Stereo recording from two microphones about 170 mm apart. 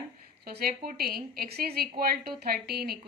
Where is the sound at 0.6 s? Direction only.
60° right (ahead or behind).